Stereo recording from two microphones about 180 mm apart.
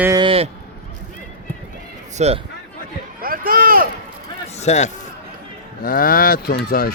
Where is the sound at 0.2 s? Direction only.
30° right (ahead or behind).